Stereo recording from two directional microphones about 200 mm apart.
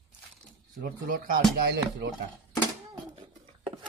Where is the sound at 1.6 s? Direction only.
55° right (ahead or behind).